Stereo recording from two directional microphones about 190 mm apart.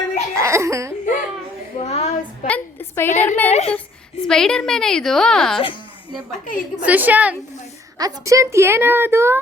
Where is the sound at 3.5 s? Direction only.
35° left (ahead or behind).